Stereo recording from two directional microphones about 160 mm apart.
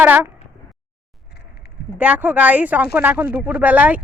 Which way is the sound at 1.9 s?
10° right (ahead or behind).